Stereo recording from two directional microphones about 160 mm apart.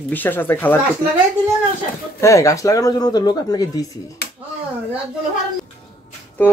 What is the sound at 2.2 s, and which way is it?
Speech, 20° left (ahead or behind).